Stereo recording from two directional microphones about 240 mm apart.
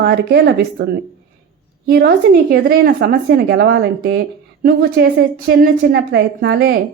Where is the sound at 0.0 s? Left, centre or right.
Right.